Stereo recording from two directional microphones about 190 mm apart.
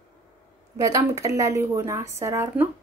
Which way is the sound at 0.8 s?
15° right (ahead or behind).